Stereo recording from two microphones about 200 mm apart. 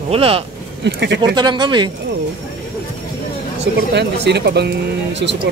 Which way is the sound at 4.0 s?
55° right (ahead or behind).